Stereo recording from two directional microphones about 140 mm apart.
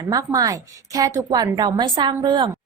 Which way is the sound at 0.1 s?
25° right (ahead or behind).